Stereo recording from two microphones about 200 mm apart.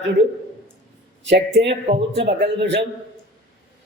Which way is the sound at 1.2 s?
60° right (ahead or behind).